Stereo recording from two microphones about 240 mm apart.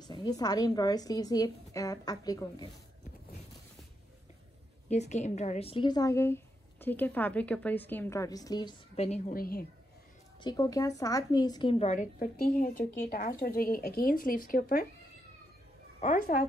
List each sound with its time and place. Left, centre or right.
0.0 s a woman's voice: centre
4.8 s a woman's voice: left
10.4 s a woman's voice: centre; by 14.9 s left
16.0 s a woman's voice: left